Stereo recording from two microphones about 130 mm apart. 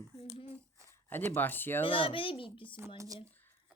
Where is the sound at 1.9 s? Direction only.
45° left (ahead or behind).